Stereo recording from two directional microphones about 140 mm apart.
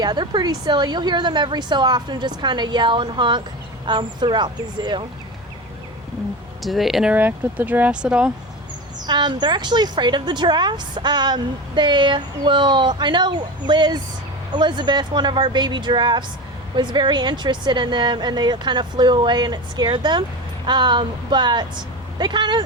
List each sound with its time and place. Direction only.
0.0 s speech: 30° right (ahead or behind)
6.6 s speech: centre (ahead or behind)
9.0 s speech: 35° right (ahead or behind)